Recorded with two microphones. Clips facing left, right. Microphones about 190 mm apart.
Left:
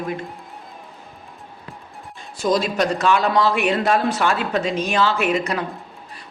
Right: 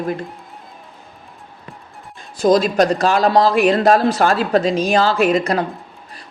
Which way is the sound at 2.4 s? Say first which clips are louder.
Right 6 dB; 40° right (ahead or behind).